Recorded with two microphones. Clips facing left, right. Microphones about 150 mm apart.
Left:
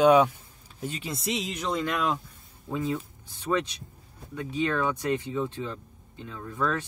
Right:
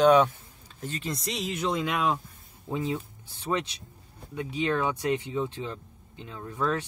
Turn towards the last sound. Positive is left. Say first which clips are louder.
# even
turn(degrees=-15)  # may be behind; listen again after turning